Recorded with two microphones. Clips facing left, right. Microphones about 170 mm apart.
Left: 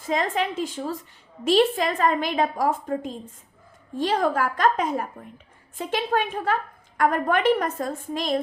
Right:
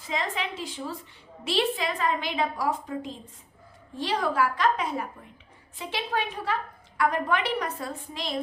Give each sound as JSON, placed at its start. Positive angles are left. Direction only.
{"t": 0.0, "sound": "a woman's voice", "side_deg": 45}